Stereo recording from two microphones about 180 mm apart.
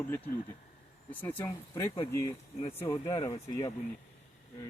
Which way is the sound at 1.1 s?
10° left (ahead or behind).